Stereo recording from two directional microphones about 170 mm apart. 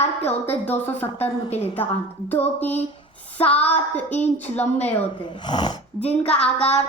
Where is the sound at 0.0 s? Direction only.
40° left (ahead or behind).